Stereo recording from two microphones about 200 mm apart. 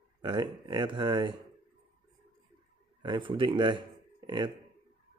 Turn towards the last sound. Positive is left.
turn(degrees=-20)  # may be behind; listen again after turning